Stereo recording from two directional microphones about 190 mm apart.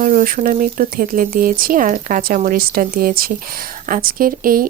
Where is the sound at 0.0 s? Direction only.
45° right (ahead or behind).